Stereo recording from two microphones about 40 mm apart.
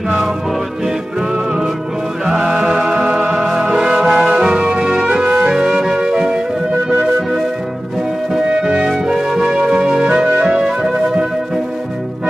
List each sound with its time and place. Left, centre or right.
2.4 s music: centre
5.5 s music: centre
8.5 s music: centre
9.1 s music: centre